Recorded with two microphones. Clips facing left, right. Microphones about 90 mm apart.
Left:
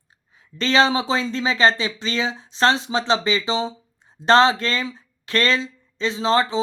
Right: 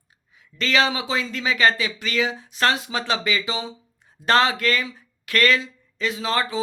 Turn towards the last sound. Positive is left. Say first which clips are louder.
# left 5 dB
turn(degrees=30)  # may be behind; listen again after turning